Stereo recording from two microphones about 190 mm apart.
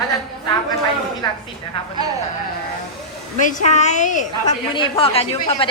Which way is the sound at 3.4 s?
40° left (ahead or behind).